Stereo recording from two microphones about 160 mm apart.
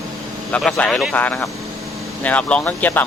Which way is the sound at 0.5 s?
5° left (ahead or behind).